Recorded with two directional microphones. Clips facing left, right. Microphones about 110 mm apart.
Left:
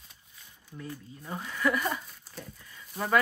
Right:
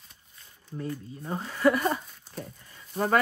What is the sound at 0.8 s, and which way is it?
Speech, 45° right (ahead or behind).